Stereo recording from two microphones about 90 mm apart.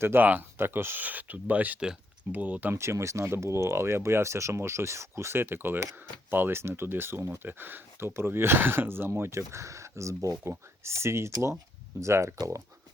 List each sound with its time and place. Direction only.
0.0 s speech: 25° right (ahead or behind)